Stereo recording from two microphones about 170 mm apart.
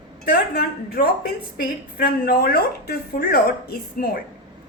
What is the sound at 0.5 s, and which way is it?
A woman's voice, 70° left (ahead or behind).